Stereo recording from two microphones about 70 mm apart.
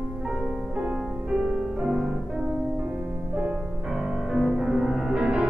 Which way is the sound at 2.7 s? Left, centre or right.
Centre.